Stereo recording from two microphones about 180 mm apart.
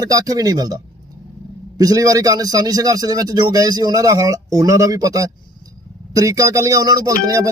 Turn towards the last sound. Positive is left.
turn(degrees=-20)  # may be behind; listen again after turning